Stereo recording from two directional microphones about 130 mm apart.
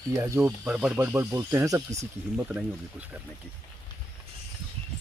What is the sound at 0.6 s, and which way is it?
Speech, 5° right (ahead or behind).